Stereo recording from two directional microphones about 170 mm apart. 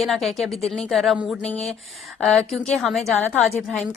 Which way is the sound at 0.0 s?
Centre (ahead or behind).